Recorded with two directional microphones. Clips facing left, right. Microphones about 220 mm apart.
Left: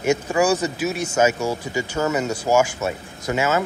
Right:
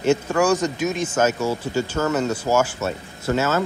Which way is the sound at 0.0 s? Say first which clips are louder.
Even; 10° left (ahead or behind).